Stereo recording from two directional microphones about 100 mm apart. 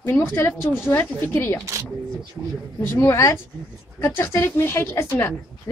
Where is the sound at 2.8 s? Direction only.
20° left (ahead or behind).